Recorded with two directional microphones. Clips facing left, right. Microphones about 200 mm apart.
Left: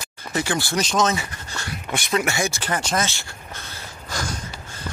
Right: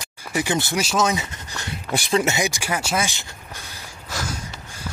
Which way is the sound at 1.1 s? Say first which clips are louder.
Right 1 dB; 20° right (ahead or behind).